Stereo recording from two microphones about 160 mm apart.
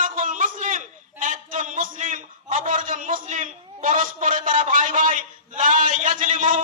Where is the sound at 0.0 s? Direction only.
55° right (ahead or behind).